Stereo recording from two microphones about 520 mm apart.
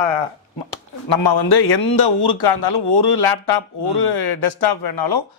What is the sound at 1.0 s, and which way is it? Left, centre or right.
A man's voice, left.